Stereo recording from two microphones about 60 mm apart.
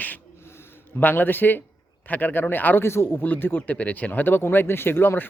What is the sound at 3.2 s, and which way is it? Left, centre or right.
Speech, left.